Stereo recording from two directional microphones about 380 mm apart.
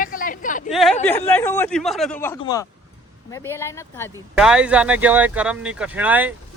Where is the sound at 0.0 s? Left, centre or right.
Left.